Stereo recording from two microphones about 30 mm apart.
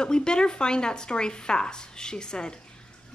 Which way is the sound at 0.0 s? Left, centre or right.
Left.